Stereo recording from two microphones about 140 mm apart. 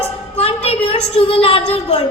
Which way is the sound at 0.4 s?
45° left (ahead or behind).